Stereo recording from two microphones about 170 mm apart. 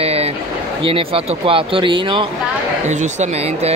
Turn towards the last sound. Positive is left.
turn(degrees=-40)  # may be behind; listen again after turning